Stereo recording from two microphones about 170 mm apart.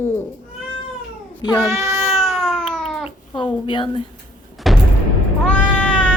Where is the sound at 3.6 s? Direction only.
30° left (ahead or behind).